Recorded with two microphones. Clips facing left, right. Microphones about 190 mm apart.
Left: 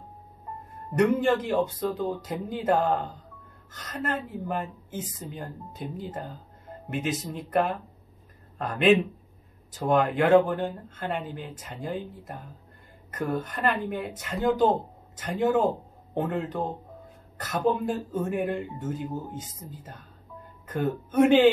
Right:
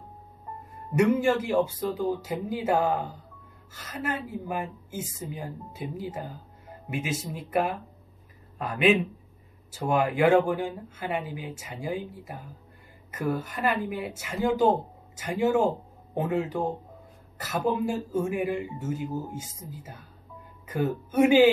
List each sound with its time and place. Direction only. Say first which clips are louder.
0.9 s a woman's voice: even; 10° right (ahead or behind)